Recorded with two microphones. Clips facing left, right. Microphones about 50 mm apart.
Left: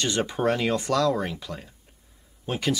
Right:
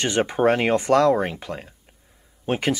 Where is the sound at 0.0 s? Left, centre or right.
Right.